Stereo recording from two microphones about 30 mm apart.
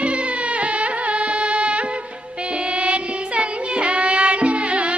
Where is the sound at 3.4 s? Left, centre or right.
Right.